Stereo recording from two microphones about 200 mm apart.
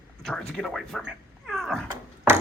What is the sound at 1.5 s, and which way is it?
Cat, centre (ahead or behind).